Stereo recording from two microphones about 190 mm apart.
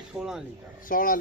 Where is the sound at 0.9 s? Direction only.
45° left (ahead or behind).